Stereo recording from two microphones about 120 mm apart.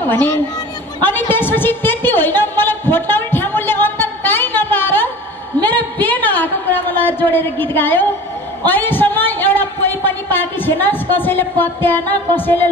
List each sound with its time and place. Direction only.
1.3 s music: 15° left (ahead or behind)
5.6 s a sound: 15° left (ahead or behind)
8.6 s speech: 15° left (ahead or behind)